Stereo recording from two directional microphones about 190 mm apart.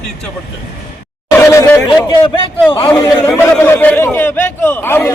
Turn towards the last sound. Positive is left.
turn(degrees=15)  # may be behind; listen again after turning